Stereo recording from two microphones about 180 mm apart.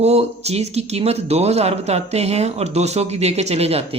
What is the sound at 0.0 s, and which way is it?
Speech, 35° right (ahead or behind).